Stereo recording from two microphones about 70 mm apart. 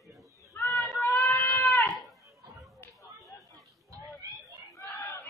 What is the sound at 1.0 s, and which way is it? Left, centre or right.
Goat, left.